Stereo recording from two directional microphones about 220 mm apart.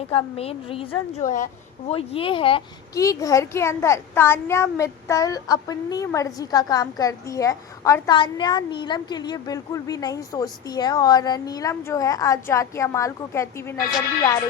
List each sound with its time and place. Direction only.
0.1 s a woman's voice: 25° left (ahead or behind)